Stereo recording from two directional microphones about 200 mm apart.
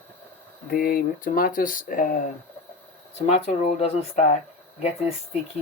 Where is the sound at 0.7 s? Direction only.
45° left (ahead or behind).